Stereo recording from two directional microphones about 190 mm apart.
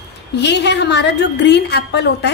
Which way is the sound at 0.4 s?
65° left (ahead or behind).